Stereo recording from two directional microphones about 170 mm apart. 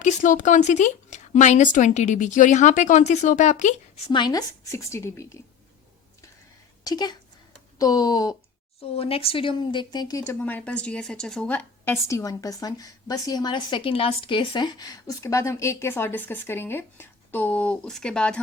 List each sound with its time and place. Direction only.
0.0 s speech: 50° left (ahead or behind)
4.1 s a woman's voice: 25° left (ahead or behind)
6.8 s speech: 25° left (ahead or behind)
8.8 s speech: 35° left (ahead or behind)
10.4 s a woman's voice: 10° left (ahead or behind)